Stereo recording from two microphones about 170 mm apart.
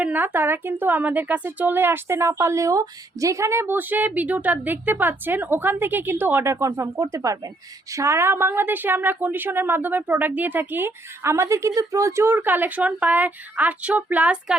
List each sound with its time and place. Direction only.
0.0 s speech: 10° right (ahead or behind)